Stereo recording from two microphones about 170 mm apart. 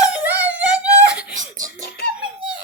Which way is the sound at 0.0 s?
10° right (ahead or behind).